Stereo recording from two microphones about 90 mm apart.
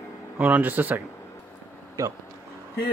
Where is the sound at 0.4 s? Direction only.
15° right (ahead or behind).